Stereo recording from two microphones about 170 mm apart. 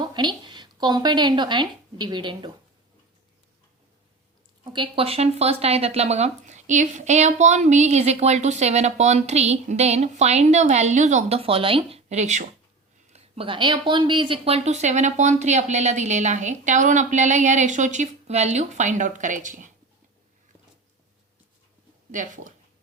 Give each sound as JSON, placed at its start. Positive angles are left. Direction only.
{"t": 0.0, "sound": "a woman's voice", "side_deg": -25}
{"t": 4.6, "sound": "speech", "side_deg": -30}
{"t": 22.1, "sound": "speech", "side_deg": -50}